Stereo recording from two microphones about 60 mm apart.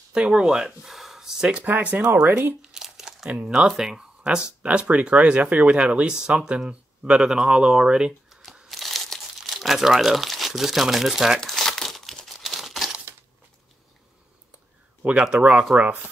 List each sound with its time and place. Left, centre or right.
0.1 s speech: centre
0.8 s gasp: centre
1.5 s speech: right
2.6 s crumpling: centre
3.3 s speech: right
3.5 s speech: centre
8.6 s crumpling: centre
11.4 s crumpling: centre
15.0 s speech: centre